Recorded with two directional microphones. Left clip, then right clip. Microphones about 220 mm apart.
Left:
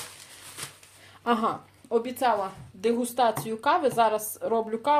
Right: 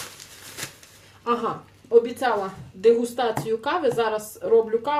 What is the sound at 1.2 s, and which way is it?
Speech, 50° left (ahead or behind).